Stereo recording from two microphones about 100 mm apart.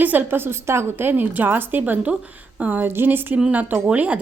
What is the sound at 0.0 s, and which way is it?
A woman's voice, 15° right (ahead or behind).